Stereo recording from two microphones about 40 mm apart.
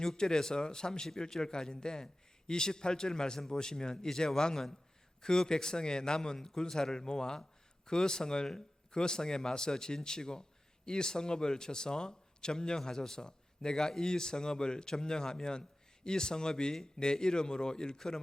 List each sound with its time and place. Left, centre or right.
0.0 s a man's voice: centre